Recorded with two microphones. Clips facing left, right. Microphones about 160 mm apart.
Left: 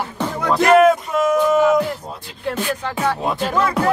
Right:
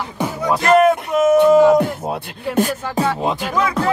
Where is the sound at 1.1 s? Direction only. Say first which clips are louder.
Right 4 dB; 25° right (ahead or behind).